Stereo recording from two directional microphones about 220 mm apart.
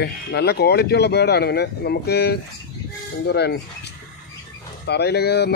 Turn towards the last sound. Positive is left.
turn(degrees=50)  # may be behind; listen again after turning